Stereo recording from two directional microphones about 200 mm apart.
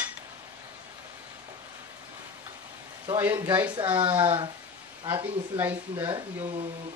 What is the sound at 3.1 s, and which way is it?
Speech, 10° right (ahead or behind).